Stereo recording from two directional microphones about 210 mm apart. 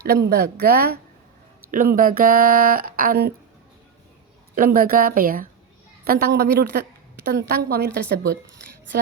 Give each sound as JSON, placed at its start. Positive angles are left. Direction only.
{"t": 0.0, "sound": "speech", "side_deg": -50}
{"t": 4.5, "sound": "speech", "side_deg": -40}